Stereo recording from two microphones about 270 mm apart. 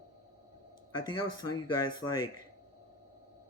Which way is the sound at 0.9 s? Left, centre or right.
Centre.